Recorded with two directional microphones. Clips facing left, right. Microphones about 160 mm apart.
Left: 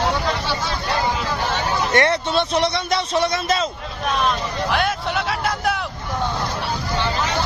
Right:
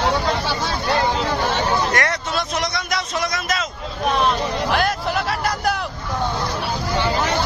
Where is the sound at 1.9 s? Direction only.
30° left (ahead or behind).